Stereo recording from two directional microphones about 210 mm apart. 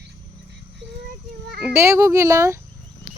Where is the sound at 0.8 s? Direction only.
55° right (ahead or behind).